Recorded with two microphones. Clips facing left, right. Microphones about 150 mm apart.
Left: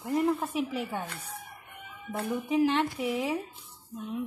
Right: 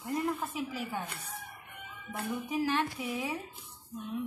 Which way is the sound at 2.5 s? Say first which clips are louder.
Left 6 dB; 25° left (ahead or behind).